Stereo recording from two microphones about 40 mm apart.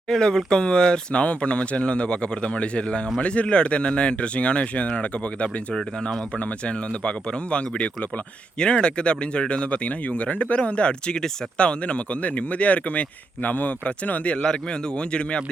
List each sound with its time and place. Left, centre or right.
0.1 s speech: centre; by 14.4 s left
14.4 s speech: left